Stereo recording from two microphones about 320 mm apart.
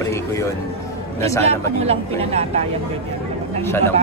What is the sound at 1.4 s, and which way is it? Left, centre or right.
Speech, centre.